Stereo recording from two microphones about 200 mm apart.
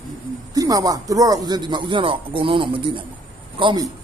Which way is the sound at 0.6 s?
20° right (ahead or behind).